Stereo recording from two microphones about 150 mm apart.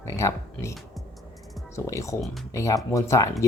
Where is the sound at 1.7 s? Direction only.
20° left (ahead or behind).